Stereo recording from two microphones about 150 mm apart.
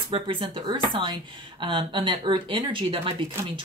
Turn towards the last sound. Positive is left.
turn(degrees=-35)  # may be behind; listen again after turning